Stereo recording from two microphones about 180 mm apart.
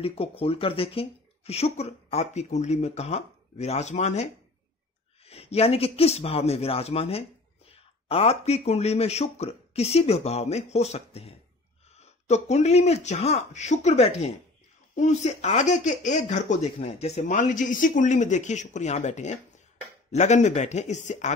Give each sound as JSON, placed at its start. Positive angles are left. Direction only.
{"t": 0.0, "sound": "a man's voice", "side_deg": 30}